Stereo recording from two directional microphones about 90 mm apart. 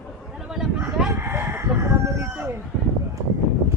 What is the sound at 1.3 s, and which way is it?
Chicken, 25° right (ahead or behind).